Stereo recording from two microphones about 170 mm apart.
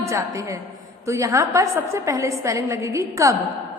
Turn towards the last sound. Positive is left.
turn(degrees=-20)  # may be behind; listen again after turning